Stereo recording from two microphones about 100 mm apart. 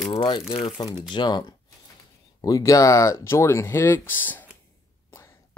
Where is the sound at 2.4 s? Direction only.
35° left (ahead or behind); by 4.5 s 20° left (ahead or behind).